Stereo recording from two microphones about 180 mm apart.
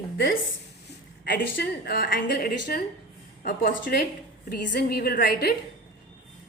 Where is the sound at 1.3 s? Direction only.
65° left (ahead or behind).